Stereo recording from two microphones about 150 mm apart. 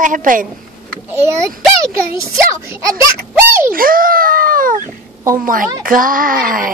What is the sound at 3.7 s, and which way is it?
Speech, 70° right (ahead or behind).